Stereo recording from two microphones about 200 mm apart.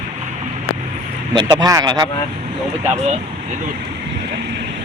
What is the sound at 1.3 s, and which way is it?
Speech, 25° right (ahead or behind).